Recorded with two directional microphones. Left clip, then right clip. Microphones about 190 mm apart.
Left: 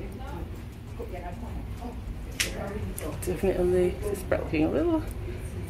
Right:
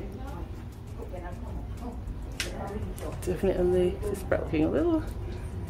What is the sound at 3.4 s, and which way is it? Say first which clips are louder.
Speech: left 1 dB; 5° right (ahead or behind).